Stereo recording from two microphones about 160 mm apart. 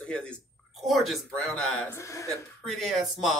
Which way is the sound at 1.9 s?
20° left (ahead or behind).